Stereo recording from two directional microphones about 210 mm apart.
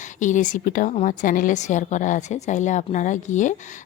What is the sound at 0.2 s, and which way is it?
A woman's voice, 35° left (ahead or behind).